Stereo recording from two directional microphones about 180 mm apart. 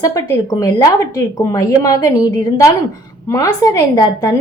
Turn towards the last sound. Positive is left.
turn(degrees=20)  # may be behind; listen again after turning